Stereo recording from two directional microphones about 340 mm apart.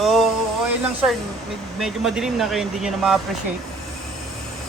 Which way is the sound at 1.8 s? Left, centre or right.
Centre.